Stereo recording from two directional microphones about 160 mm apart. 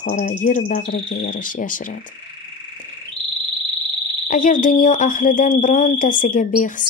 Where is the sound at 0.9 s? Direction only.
65° left (ahead or behind).